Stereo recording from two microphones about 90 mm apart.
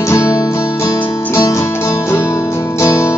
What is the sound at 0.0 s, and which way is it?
Music, 35° left (ahead or behind).